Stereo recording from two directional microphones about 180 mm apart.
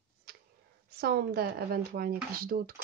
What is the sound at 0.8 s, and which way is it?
Speech, 60° right (ahead or behind).